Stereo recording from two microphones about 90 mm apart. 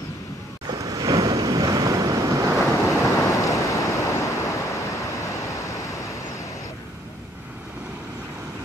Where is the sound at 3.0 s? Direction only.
35° left (ahead or behind).